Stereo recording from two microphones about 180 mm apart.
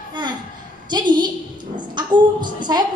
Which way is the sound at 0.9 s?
25° right (ahead or behind).